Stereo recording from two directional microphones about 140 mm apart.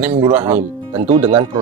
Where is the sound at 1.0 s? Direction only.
45° right (ahead or behind).